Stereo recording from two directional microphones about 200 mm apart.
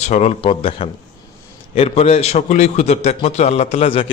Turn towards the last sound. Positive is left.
turn(degrees=25)  # may be behind; listen again after turning